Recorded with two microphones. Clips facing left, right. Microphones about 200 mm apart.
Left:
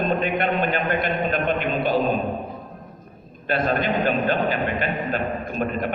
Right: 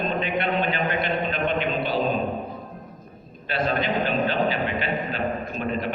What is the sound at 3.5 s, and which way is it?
A man's voice, 50° left (ahead or behind).